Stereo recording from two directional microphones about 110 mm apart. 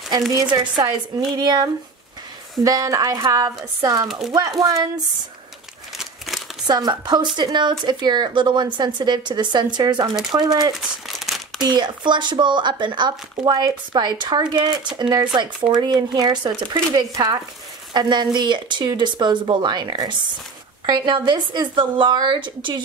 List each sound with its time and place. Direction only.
0.3 s speech: 45° right (ahead or behind)
5.9 s a sound: centre (ahead or behind)
6.7 s speech: 40° right (ahead or behind)
11.2 s crumpling: centre (ahead or behind)
11.6 s speech: 40° right (ahead or behind)